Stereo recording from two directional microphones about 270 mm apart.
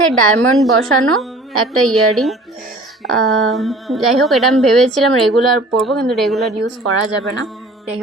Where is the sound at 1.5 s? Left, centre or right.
Right.